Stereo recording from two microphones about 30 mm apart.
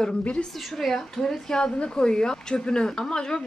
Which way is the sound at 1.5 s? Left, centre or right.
Left.